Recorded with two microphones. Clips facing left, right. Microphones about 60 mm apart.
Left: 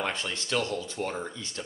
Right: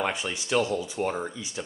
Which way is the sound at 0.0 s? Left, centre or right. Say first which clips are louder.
Right 3 dB; centre.